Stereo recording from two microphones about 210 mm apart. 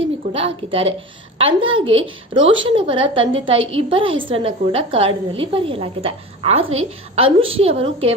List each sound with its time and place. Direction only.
0.3 s a woman's voice: 25° right (ahead or behind)
2.4 s a woman's voice: 65° right (ahead or behind)
2.6 s a woman's voice: 25° right (ahead or behind)